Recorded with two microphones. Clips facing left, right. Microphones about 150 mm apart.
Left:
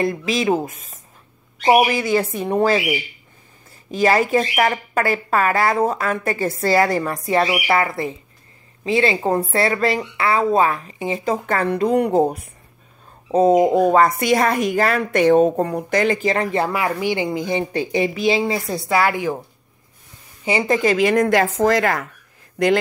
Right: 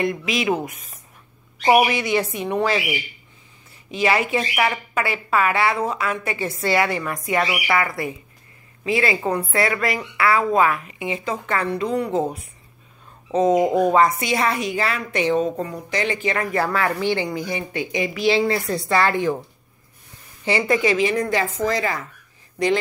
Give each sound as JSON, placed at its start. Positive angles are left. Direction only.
{"t": 0.0, "sound": "speech", "side_deg": 35}
{"t": 1.6, "sound": "speech", "side_deg": 30}
{"t": 3.9, "sound": "a woman's voice", "side_deg": 40}
{"t": 13.3, "sound": "speech", "side_deg": 35}
{"t": 13.9, "sound": "a woman's voice", "side_deg": 50}
{"t": 16.5, "sound": "a woman's voice", "side_deg": 20}
{"t": 18.2, "sound": "a woman's voice", "side_deg": 20}
{"t": 20.4, "sound": "a woman's voice", "side_deg": 20}
{"t": 20.8, "sound": "a woman's voice", "side_deg": 50}